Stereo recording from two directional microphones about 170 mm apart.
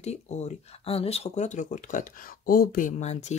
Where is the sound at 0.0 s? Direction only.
40° left (ahead or behind); by 2.9 s 60° left (ahead or behind).